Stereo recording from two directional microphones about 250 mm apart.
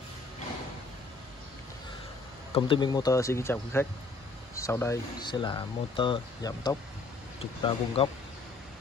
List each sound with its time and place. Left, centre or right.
2.5 s speech: centre